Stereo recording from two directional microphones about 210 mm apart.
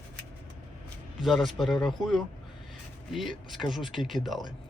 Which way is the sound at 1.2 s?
Centre (ahead or behind).